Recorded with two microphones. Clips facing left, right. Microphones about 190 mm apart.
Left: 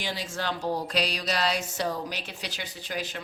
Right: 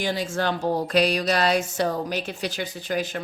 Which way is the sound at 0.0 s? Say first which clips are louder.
Right 7 dB; 50° right (ahead or behind).